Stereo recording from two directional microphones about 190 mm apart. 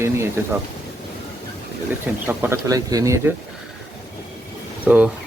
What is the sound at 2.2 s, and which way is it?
Speech, 10° right (ahead or behind).